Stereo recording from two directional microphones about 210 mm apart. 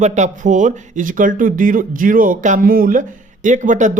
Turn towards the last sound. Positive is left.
turn(degrees=-35)  # may be behind; listen again after turning